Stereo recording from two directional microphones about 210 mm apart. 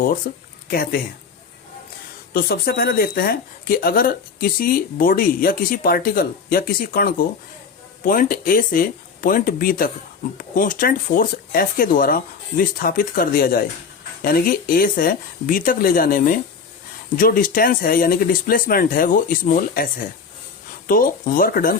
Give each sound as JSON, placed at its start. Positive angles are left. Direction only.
{"t": 0.3, "sound": "speech", "side_deg": 50}
{"t": 2.3, "sound": "speech", "side_deg": 45}